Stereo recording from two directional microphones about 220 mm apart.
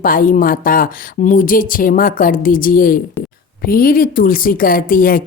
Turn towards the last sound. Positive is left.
turn(degrees=40)  # may be behind; listen again after turning